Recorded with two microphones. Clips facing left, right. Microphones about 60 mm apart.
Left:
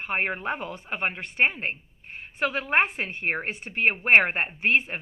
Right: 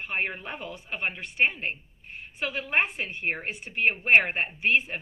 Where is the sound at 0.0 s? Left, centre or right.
Left.